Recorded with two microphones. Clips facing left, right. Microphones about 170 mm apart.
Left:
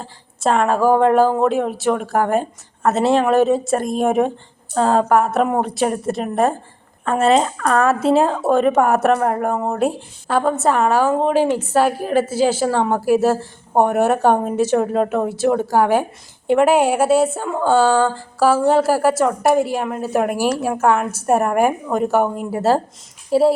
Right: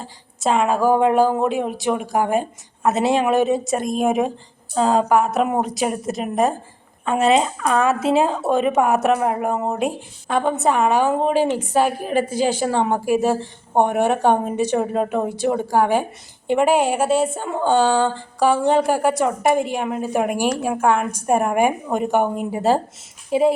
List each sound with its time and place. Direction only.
0.0 s a woman's voice: centre (ahead or behind)
10.5 s a woman's voice: 15° right (ahead or behind)
11.1 s speech: centre (ahead or behind)